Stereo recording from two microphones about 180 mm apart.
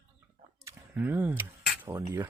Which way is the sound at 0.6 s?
10° right (ahead or behind).